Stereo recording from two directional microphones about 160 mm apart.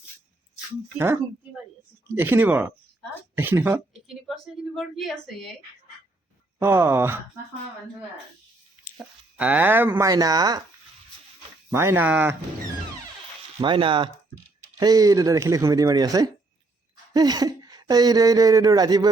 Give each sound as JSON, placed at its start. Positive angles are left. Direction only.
{"t": 0.9, "sound": "speech", "side_deg": -15}
{"t": 4.3, "sound": "speech", "side_deg": 0}
{"t": 6.6, "sound": "speech", "side_deg": -15}
{"t": 9.0, "sound": "speech", "side_deg": -10}
{"t": 9.9, "sound": "speech", "side_deg": -20}
{"t": 11.7, "sound": "speech", "side_deg": -15}
{"t": 13.6, "sound": "speech", "side_deg": -30}